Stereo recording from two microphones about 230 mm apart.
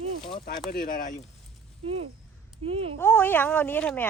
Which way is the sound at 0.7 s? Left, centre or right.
Left.